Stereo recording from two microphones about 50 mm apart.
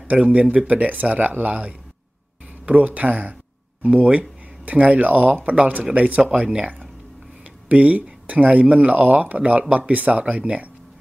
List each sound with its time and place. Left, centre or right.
0.2 s speech: right